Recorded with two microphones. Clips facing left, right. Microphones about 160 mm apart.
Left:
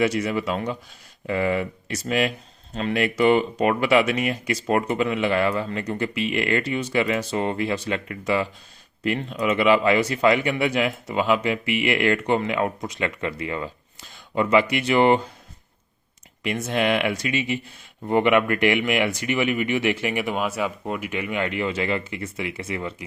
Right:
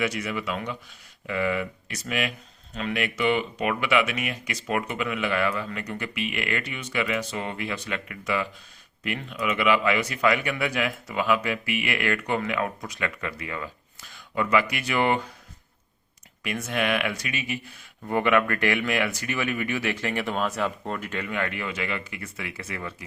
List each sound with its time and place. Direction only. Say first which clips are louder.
0.0 s speech: left 6 dB; 30° left (ahead or behind)
16.4 s speech: left 4 dB; 25° left (ahead or behind)